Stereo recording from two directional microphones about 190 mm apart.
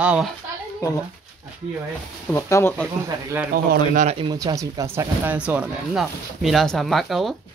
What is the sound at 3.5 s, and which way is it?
Speech, 50° right (ahead or behind).